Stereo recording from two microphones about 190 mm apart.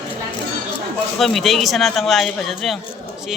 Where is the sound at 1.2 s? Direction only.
Centre (ahead or behind).